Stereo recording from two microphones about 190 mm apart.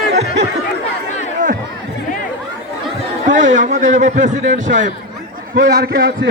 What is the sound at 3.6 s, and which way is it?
A man's voice, 40° right (ahead or behind).